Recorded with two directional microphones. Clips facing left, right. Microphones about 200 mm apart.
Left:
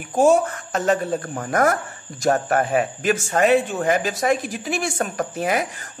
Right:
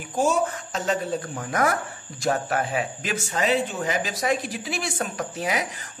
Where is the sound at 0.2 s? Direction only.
55° left (ahead or behind).